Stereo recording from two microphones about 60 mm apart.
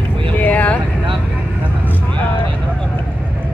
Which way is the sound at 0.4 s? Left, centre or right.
Left.